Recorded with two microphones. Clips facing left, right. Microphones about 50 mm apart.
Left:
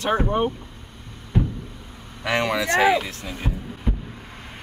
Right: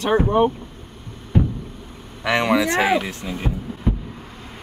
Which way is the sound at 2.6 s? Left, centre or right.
Centre.